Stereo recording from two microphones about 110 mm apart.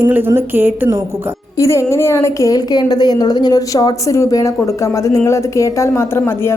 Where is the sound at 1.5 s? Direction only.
25° left (ahead or behind).